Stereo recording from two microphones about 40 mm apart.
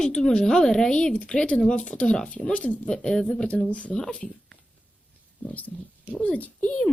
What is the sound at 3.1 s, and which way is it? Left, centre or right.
Speech, centre.